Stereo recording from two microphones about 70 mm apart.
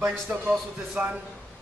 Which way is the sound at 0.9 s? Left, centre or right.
Centre.